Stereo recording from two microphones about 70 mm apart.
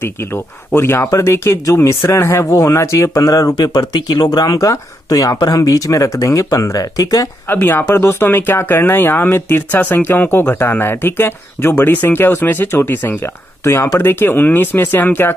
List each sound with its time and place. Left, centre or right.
0.0 s speech: left
7.4 s speech: left